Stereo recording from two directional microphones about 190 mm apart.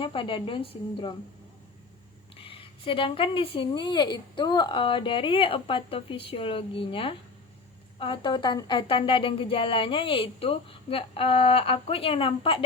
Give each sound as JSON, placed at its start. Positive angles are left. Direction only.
{"t": 0.0, "sound": "a woman's voice", "side_deg": 25}
{"t": 2.4, "sound": "a woman's voice", "side_deg": 30}